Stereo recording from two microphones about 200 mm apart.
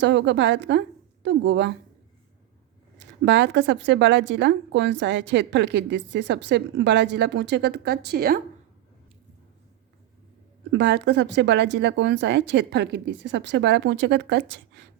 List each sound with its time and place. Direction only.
0.0 s a woman's voice: 60° right (ahead or behind)
3.2 s a woman's voice: 60° right (ahead or behind)
10.7 s a woman's voice: 60° right (ahead or behind)